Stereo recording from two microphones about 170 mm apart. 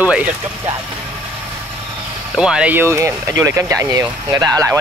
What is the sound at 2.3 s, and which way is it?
Speech, 5° right (ahead or behind).